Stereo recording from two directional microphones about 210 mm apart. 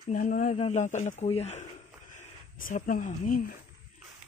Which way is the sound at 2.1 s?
40° left (ahead or behind).